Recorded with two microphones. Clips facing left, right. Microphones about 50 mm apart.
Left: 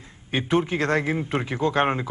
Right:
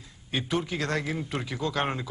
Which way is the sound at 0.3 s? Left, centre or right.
Left.